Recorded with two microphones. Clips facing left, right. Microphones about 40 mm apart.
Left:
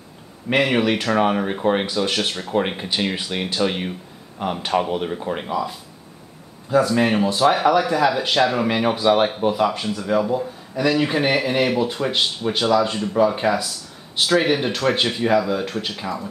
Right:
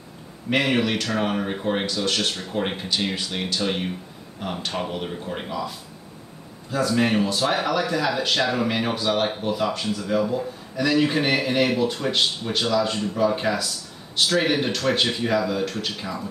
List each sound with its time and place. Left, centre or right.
0.5 s speech: centre